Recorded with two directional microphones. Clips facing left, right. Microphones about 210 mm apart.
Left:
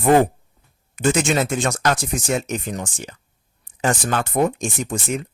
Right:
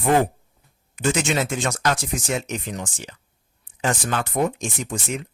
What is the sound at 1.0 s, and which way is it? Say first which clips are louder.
Speech: left 3 dB; 45° left (ahead or behind).